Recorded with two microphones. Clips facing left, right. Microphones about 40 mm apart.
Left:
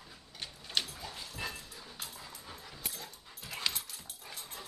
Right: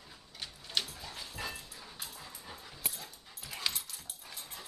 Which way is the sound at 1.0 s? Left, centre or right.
Centre.